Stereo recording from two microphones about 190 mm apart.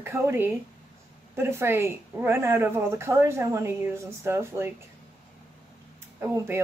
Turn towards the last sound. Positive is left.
turn(degrees=-10)  # may be behind; listen again after turning